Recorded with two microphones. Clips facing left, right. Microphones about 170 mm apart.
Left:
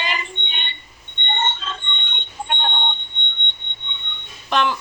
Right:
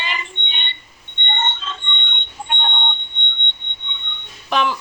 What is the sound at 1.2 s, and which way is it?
Alarm clock, 40° left (ahead or behind).